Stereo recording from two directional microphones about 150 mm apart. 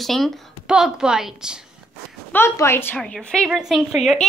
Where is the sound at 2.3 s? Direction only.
15° left (ahead or behind).